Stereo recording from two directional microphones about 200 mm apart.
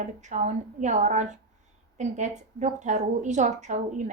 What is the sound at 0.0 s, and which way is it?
A woman's voice, 35° right (ahead or behind).